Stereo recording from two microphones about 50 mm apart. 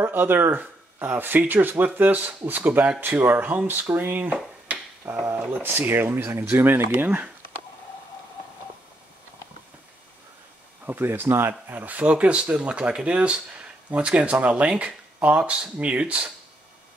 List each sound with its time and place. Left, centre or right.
0.0 s speech: right
10.9 s speech: right
11.8 s speech: right